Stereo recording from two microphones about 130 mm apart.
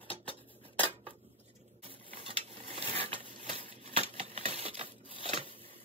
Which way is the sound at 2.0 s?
45° right (ahead or behind).